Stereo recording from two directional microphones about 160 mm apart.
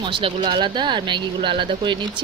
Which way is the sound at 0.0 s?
30° right (ahead or behind).